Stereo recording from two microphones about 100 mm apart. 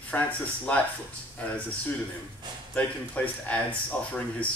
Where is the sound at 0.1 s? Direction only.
15° left (ahead or behind).